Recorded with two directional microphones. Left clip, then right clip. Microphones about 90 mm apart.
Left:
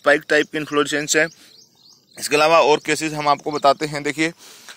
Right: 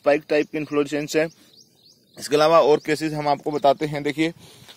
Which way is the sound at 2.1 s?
40° right (ahead or behind).